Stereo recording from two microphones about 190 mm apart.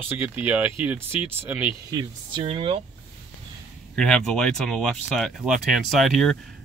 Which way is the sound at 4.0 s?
5° left (ahead or behind).